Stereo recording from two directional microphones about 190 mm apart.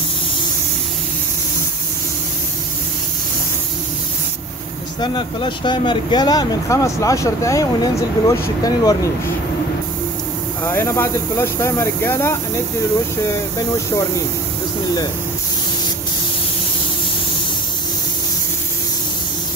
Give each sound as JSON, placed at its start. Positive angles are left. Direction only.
{"t": 5.0, "sound": "speech", "side_deg": 25}
{"t": 10.6, "sound": "speech", "side_deg": 10}